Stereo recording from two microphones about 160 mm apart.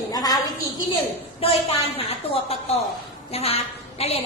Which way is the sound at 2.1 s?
40° left (ahead or behind).